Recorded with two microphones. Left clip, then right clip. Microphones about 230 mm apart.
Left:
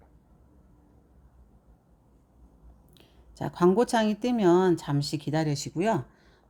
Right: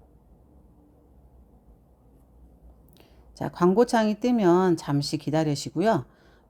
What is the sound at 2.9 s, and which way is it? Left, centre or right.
A woman's voice, centre.